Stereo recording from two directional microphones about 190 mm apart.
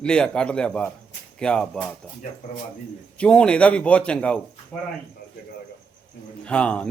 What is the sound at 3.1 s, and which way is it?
A man's voice, 5° left (ahead or behind).